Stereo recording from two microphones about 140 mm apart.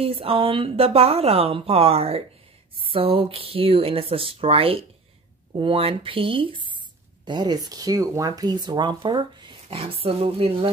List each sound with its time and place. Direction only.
0.0 s a woman's voice: 45° right (ahead or behind)